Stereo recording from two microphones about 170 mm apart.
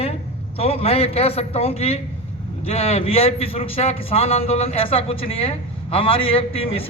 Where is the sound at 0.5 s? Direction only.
35° left (ahead or behind).